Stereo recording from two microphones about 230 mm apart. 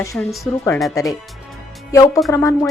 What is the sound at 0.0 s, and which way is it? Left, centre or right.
Speech, centre.